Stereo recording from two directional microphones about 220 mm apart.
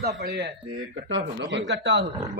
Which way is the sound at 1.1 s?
55° right (ahead or behind).